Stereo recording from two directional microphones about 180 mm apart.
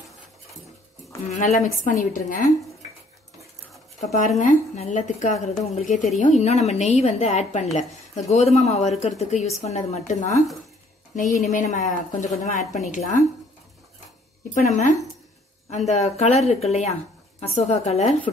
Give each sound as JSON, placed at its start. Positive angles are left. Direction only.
{"t": 1.3, "sound": "a woman's voice", "side_deg": 45}
{"t": 4.0, "sound": "a woman's voice", "side_deg": 40}
{"t": 14.5, "sound": "a woman's voice", "side_deg": 45}